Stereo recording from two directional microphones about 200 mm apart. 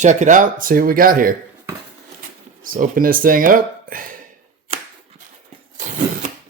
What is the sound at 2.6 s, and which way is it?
Speech, 45° right (ahead or behind).